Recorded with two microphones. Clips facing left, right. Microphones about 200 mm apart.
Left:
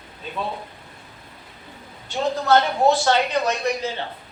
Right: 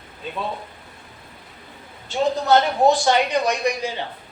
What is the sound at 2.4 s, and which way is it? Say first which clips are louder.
Speech: even; 15° right (ahead or behind).